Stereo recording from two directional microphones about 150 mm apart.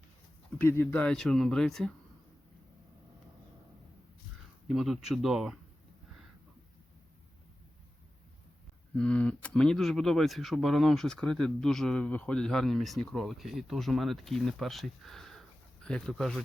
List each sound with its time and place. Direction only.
0.6 s speech: 15° left (ahead or behind)
4.7 s speech: centre (ahead or behind)
9.0 s speech: 10° left (ahead or behind)